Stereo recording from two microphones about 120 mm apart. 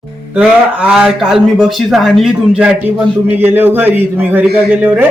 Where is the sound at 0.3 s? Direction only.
10° right (ahead or behind).